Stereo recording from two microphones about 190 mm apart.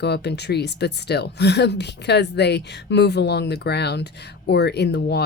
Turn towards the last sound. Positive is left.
turn(degrees=60)  # may be behind; listen again after turning